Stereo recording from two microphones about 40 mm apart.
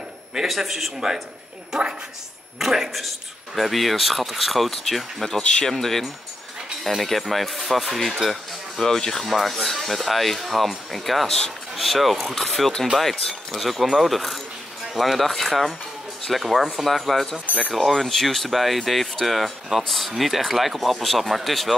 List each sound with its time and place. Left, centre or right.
0.5 s speech: centre
1.7 s a woman's voice: centre
2.6 s speech: centre
5.4 s speech: left
5.7 s speech: centre
13.1 s speech: centre
13.6 s speech: centre